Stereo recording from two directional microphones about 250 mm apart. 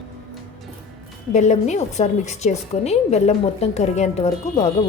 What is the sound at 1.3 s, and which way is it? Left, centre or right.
A woman's voice, left.